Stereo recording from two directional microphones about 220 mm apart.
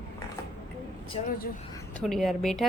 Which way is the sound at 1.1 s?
35° left (ahead or behind).